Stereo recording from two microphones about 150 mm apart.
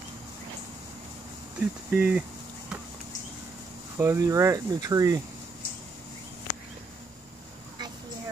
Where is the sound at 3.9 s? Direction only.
20° right (ahead or behind).